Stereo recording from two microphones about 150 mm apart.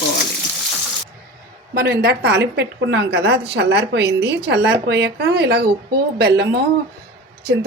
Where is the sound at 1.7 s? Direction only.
90° right.